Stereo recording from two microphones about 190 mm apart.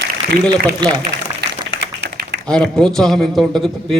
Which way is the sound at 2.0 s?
65° right (ahead or behind).